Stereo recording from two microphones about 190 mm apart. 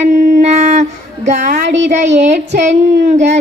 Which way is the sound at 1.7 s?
70° right (ahead or behind).